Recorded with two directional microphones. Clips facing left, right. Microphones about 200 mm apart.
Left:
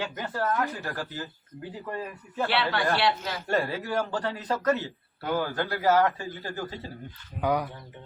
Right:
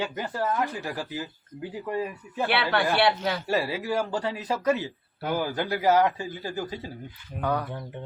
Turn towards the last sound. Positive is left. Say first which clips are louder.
# left 1 dB
turn(degrees=10)  # may be behind; listen again after turning